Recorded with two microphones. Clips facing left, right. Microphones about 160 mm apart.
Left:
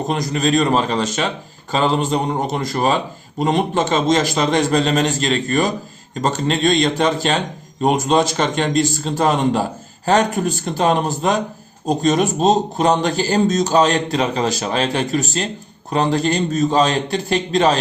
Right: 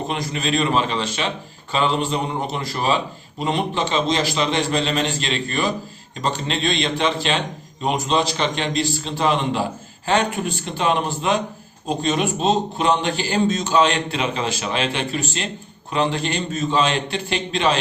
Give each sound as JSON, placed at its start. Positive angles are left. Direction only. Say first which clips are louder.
{"t": 0.1, "sound": "a man's voice", "louder": "left 7 dB", "side_deg": 40}